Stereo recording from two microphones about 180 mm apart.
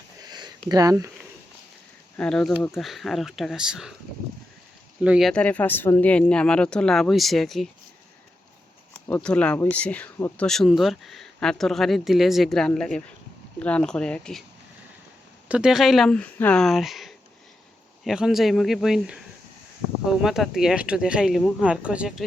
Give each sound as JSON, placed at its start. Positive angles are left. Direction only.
{"t": 0.3, "sound": "a sound", "side_deg": -25}
{"t": 0.7, "sound": "speech", "side_deg": -20}
{"t": 2.1, "sound": "speech", "side_deg": 5}
{"t": 4.9, "sound": "speech", "side_deg": -5}
{"t": 5.3, "sound": "speech", "side_deg": 10}
{"t": 9.0, "sound": "speech", "side_deg": 10}
{"t": 15.4, "sound": "speech", "side_deg": -5}